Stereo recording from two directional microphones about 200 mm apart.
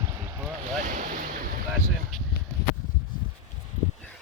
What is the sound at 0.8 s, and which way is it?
Ocean, 40° right (ahead or behind).